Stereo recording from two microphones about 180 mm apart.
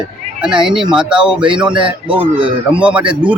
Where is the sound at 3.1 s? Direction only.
10° right (ahead or behind).